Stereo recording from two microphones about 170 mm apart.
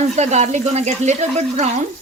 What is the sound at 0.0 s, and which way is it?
Speech, 40° right (ahead or behind).